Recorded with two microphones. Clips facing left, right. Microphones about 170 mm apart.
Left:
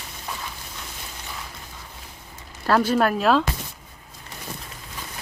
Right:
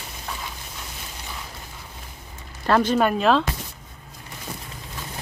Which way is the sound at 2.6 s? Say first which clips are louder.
Even; 5° left (ahead or behind).